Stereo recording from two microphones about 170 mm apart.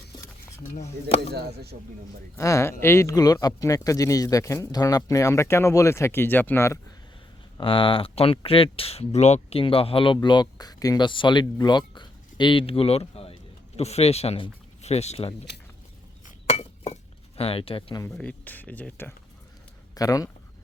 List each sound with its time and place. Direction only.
0.7 s speech: 40° left (ahead or behind)
1.3 s speech: 70° right (ahead or behind)
2.3 s speech: 15° left (ahead or behind)
7.6 s speech: 30° left (ahead or behind)
16.2 s chink: 40° left (ahead or behind)
18.1 s speech: 10° left (ahead or behind)
19.9 s speech: 20° left (ahead or behind)